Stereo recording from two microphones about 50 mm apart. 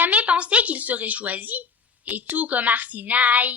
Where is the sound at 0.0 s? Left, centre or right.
Right.